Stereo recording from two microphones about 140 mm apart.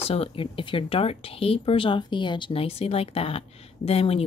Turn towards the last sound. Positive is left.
turn(degrees=45)  # may be behind; listen again after turning